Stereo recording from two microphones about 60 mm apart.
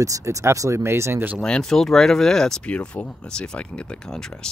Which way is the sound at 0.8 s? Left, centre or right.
Right.